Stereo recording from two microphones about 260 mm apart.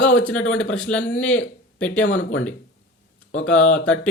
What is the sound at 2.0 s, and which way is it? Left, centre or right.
Speech, left.